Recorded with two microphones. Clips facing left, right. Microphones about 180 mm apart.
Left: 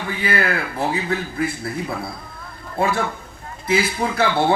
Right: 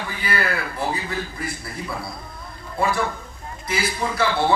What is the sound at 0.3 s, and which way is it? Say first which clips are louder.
Speech: left 3 dB; 55° left (ahead or behind).